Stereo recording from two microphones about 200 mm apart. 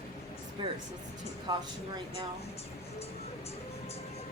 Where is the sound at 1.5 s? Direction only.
20° right (ahead or behind).